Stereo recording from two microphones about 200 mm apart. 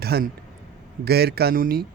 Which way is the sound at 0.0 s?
50° right (ahead or behind).